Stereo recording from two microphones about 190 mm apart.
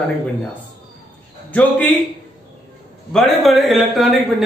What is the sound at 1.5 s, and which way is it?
Speech, 10° left (ahead or behind).